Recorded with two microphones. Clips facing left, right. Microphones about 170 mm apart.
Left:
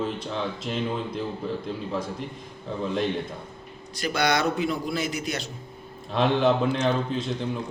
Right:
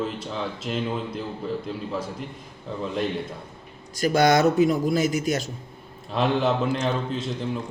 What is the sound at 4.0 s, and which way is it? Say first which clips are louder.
A man's voice: right 6 dB; 45° right (ahead or behind).